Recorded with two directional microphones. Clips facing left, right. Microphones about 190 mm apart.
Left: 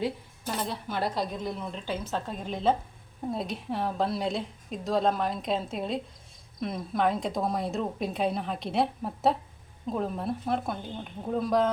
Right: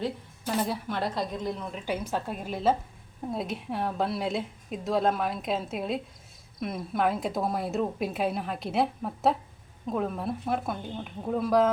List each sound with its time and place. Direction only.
0.6 s a woman's voice: centre (ahead or behind)